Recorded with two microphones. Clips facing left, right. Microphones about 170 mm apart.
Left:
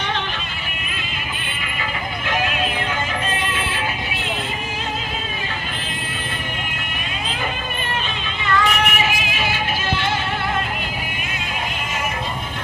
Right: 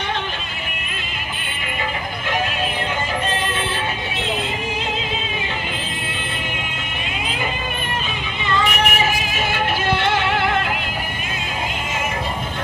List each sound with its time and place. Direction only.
8.4 s vehicle: 20° right (ahead or behind)
9.0 s music: 45° right (ahead or behind); by 10.6 s 70° right (ahead or behind)